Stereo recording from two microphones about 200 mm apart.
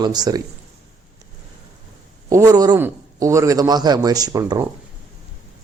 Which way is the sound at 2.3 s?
15° right (ahead or behind).